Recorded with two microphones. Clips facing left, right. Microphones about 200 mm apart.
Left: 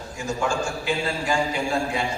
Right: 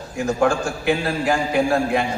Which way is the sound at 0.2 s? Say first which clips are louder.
Right 7 dB; 60° right (ahead or behind).